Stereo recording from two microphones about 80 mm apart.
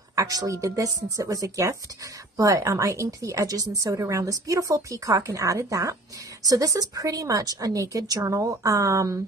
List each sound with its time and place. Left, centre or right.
0.1 s speech: right